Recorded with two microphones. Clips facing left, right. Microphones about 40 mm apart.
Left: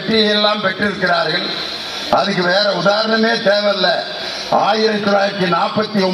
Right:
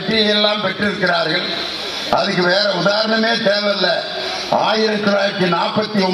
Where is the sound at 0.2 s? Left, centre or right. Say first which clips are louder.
Left 1 dB; right.